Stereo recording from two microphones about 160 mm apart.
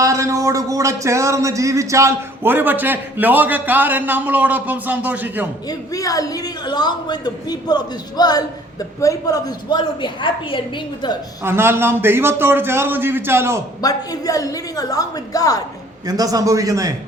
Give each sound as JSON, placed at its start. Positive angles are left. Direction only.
{"t": 0.0, "sound": "speech", "side_deg": -20}
{"t": 5.6, "sound": "a woman's voice", "side_deg": 20}
{"t": 11.4, "sound": "speech", "side_deg": -15}
{"t": 13.8, "sound": "a woman's voice", "side_deg": 20}
{"t": 16.0, "sound": "a man's voice", "side_deg": -25}